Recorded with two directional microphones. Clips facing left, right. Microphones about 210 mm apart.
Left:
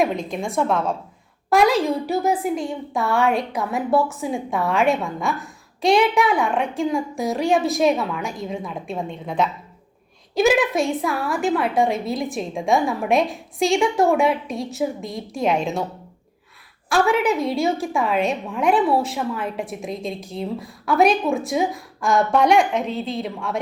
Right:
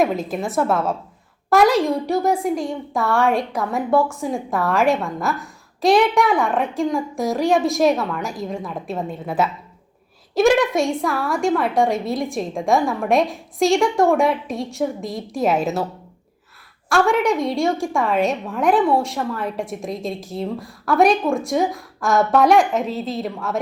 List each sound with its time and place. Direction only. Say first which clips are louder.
0.0 s a woman's voice: right 2 dB; 5° right (ahead or behind)
16.9 s a woman's voice: right 1 dB; centre (ahead or behind)